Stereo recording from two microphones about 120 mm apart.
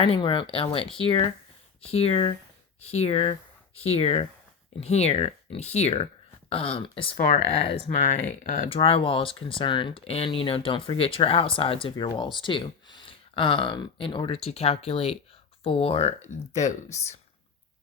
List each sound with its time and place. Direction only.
0.0 s speech: 45° left (ahead or behind); by 6.1 s 60° left (ahead or behind)
6.5 s speech: 50° left (ahead or behind); by 8.7 s 90° left
8.7 s speech: 50° left (ahead or behind); by 16.7 s 70° left (ahead or behind)